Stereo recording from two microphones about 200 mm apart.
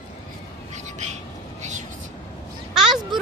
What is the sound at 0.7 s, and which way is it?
Bird, 35° right (ahead or behind).